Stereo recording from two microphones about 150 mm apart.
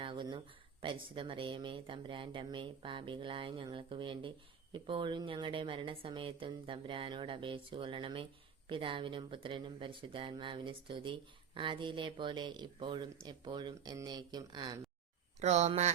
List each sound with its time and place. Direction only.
0.0 s speech: 30° right (ahead or behind)
15.4 s speech: 50° right (ahead or behind)